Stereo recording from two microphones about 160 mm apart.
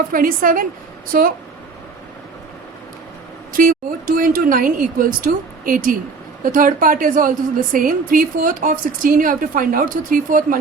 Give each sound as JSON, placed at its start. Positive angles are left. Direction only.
{"t": 0.1, "sound": "a woman's voice", "side_deg": -60}
{"t": 3.5, "sound": "a woman's voice", "side_deg": -60}